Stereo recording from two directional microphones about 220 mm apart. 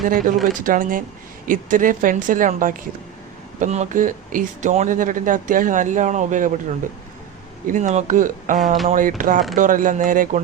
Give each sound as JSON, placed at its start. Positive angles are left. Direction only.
{"t": 0.0, "sound": "speech", "side_deg": -35}